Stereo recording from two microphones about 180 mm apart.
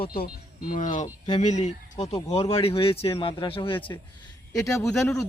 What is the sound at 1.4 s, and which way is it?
Speech, 40° left (ahead or behind).